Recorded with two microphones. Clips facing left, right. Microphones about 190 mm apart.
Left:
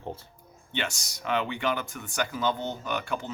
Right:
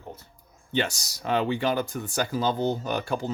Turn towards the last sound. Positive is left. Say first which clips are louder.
# right 4 dB
turn(degrees=-35)  # may be behind; listen again after turning